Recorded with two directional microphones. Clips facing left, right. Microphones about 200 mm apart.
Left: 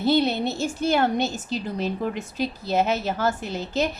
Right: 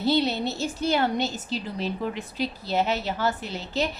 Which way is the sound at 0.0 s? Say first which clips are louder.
Left 3 dB; 55° left (ahead or behind).